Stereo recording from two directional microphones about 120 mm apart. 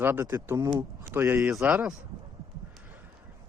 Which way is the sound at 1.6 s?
10° right (ahead or behind).